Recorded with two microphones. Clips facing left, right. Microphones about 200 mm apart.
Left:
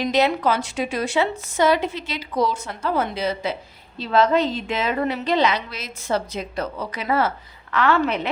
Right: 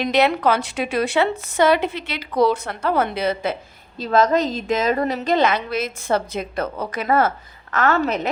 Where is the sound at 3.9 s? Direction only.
45° right (ahead or behind).